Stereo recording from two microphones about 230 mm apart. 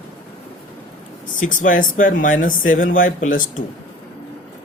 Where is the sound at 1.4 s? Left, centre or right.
Left.